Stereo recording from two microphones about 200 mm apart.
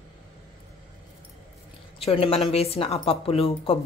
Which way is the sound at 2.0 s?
30° left (ahead or behind).